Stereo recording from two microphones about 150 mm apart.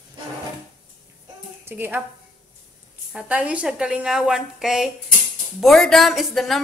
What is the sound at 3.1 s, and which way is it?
Speech, 10° right (ahead or behind).